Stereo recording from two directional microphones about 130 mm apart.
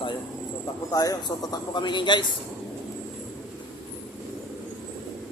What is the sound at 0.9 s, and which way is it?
A man's voice, 25° left (ahead or behind).